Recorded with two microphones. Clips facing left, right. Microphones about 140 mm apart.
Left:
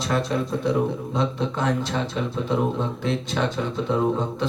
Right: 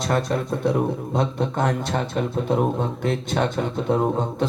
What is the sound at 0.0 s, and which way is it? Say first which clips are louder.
A man's voice: right 1 dB; 50° right (ahead or behind).